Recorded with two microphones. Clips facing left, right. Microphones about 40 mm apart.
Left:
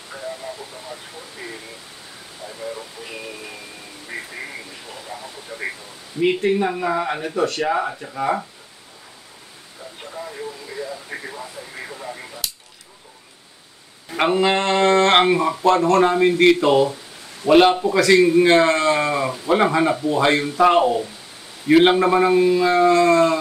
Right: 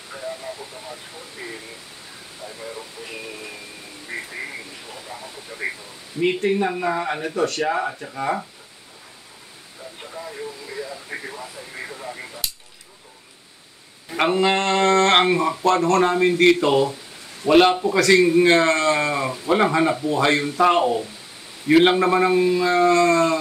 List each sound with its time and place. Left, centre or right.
0.1 s radio: centre
2.4 s a sound: centre
4.1 s speech: centre
10.0 s radio: centre
14.0 s speech: centre